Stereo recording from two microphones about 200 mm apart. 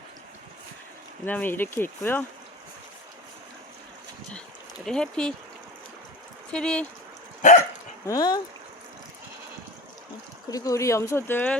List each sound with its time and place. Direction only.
1.2 s speech: 10° left (ahead or behind)
4.9 s speech: 5° left (ahead or behind)
6.5 s speech: 5° left (ahead or behind)
8.0 s speech: 20° left (ahead or behind)
10.5 s speech: 15° left (ahead or behind)